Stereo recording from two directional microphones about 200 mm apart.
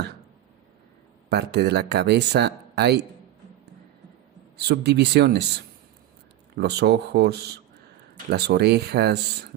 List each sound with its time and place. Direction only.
1.3 s speech: 55° right (ahead or behind)
4.5 s speech: 55° right (ahead or behind)
6.6 s speech: 55° right (ahead or behind)